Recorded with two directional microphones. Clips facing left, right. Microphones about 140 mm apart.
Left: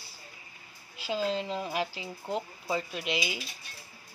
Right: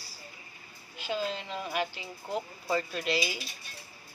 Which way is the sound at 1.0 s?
30° left (ahead or behind).